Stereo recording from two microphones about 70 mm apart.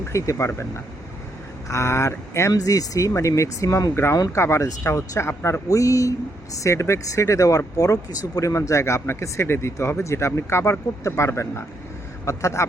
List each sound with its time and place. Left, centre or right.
0.1 s speech: left
2.5 s speech: left
3.9 s speech: left
5.3 s speech: left
5.6 s speech: left